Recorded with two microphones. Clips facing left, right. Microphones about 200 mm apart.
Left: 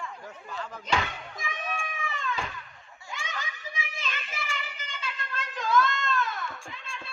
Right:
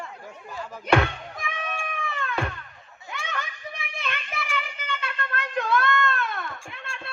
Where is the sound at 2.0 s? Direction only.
60° right (ahead or behind).